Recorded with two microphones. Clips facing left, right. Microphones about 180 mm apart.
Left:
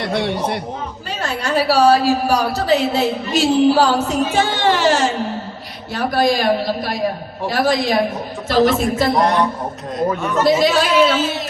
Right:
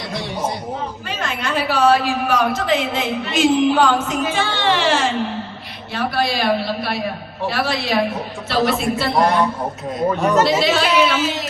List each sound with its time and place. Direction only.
0.0 s a sound: 65° left (ahead or behind)
1.2 s a man's voice: 35° left (ahead or behind)
10.4 s speech: 45° left (ahead or behind)